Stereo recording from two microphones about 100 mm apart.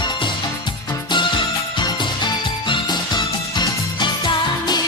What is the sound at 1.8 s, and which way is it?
Music, 50° left (ahead or behind).